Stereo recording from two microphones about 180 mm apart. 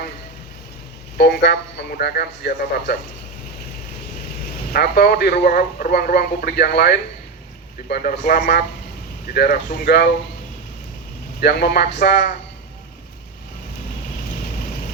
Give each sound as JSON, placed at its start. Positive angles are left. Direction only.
{"t": 1.2, "sound": "speech", "side_deg": 65}
{"t": 4.7, "sound": "speech", "side_deg": 60}
{"t": 11.3, "sound": "speech", "side_deg": 60}